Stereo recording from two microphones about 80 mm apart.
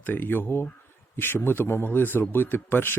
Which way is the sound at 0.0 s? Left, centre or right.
Left.